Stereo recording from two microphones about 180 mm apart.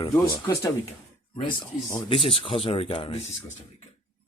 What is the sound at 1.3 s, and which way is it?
Speech, 25° left (ahead or behind).